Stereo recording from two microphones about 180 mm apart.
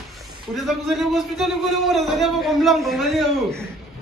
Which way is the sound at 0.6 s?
Centre (ahead or behind).